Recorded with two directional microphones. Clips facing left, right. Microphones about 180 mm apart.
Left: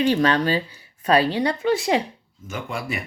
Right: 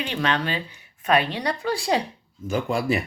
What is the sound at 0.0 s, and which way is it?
Speech, 40° left (ahead or behind).